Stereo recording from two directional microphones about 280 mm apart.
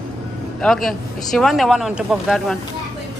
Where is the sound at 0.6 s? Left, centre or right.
Centre.